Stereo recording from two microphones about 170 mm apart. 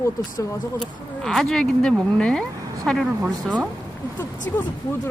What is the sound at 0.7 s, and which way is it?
Speech, 5° left (ahead or behind).